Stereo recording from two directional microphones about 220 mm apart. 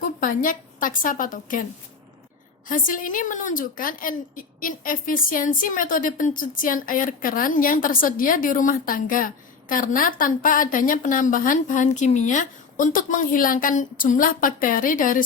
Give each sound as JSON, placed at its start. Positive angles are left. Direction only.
{"t": 0.2, "sound": "a woman's voice", "side_deg": 40}
{"t": 2.6, "sound": "a woman's voice", "side_deg": 40}